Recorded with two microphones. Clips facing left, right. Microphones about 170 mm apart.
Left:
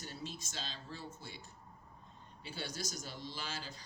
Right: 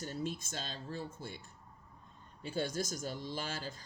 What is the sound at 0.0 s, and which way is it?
Speech, 50° right (ahead or behind).